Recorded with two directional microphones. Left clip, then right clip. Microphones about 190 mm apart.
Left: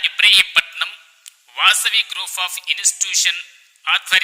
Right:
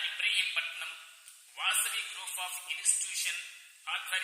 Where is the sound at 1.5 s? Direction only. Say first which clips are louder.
Left 18 dB; 55° left (ahead or behind).